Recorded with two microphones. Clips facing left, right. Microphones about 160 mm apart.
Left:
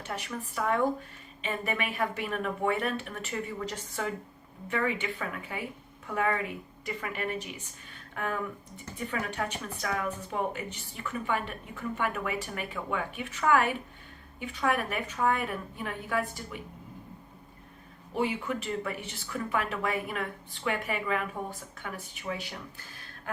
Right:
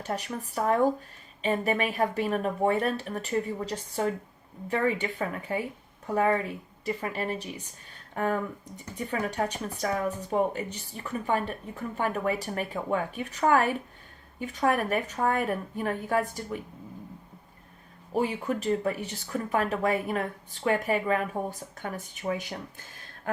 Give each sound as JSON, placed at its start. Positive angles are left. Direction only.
{"t": 0.0, "sound": "a woman's voice", "side_deg": -40}
{"t": 18.1, "sound": "a woman's voice", "side_deg": -40}